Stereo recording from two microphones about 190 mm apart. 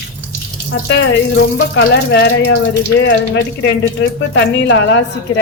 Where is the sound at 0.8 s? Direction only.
70° left (ahead or behind).